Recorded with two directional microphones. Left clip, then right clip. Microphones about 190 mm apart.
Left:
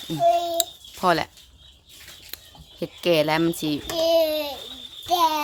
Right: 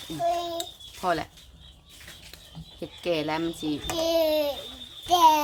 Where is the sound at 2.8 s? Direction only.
65° left (ahead or behind).